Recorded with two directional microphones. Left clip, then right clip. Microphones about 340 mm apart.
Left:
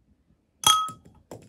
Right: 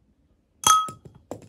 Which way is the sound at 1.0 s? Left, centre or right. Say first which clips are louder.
Right 6 dB; centre.